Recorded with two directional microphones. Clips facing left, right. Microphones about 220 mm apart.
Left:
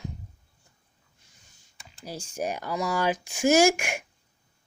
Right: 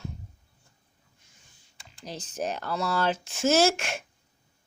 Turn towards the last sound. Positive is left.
turn(degrees=15)  # may be behind; listen again after turning